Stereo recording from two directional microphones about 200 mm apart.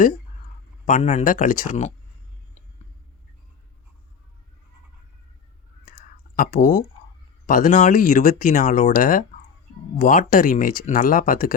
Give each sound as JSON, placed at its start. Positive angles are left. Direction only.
{"t": 0.9, "sound": "speech", "side_deg": 35}
{"t": 5.8, "sound": "whispering", "side_deg": 45}
{"t": 7.4, "sound": "speech", "side_deg": 45}